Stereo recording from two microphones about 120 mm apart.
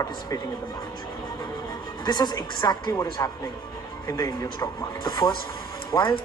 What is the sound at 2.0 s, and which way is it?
A woman's voice, 35° left (ahead or behind).